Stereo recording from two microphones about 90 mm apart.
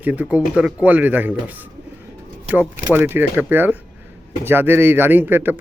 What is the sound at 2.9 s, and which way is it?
Speech, 25° right (ahead or behind).